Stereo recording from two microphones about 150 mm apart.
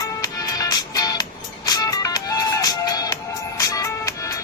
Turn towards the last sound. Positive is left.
turn(degrees=20)  # may be behind; listen again after turning